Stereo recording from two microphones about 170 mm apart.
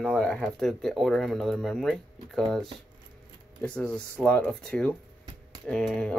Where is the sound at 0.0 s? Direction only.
5° left (ahead or behind).